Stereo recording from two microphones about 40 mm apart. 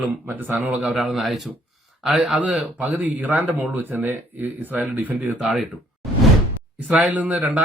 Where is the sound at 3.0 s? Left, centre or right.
Right.